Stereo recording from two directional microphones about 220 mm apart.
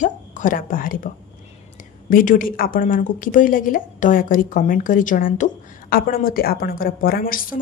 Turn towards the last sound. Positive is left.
turn(degrees=40)  # may be behind; listen again after turning